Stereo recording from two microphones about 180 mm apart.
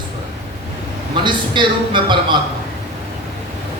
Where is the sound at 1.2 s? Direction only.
25° right (ahead or behind).